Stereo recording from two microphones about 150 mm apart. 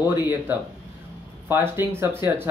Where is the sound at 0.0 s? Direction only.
15° right (ahead or behind).